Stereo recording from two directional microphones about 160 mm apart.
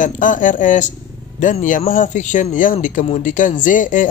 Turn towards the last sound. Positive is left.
turn(degrees=55)  # may be behind; listen again after turning